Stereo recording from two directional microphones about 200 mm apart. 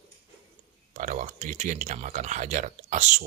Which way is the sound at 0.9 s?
35° right (ahead or behind).